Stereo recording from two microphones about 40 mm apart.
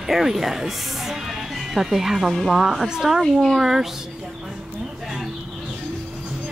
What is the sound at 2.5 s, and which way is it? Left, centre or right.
Speech, centre.